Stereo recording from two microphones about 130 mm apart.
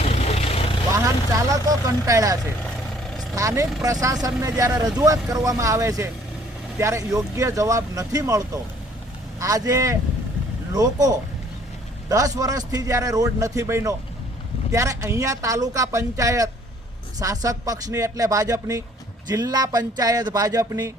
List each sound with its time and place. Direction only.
0.0 s vehicle: 50° left (ahead or behind)
1.6 s a man's voice: 25° right (ahead or behind)